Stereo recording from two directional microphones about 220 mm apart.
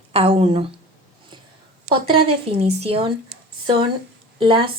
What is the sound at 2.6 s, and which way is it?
Speech, 25° right (ahead or behind).